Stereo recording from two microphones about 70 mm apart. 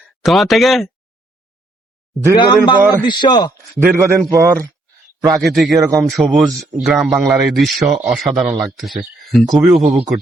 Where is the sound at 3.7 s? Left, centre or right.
Right.